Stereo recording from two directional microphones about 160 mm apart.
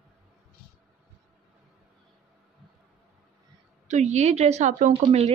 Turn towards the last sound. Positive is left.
turn(degrees=-45)  # may be behind; listen again after turning